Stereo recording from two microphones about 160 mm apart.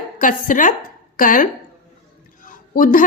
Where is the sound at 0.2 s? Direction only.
55° left (ahead or behind).